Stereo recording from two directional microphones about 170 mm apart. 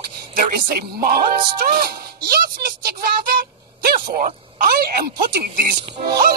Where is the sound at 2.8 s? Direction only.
60° right (ahead or behind).